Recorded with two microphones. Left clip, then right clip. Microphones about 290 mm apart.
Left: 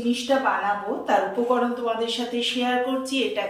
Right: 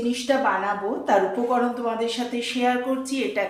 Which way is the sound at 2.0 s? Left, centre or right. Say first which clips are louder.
Even; centre.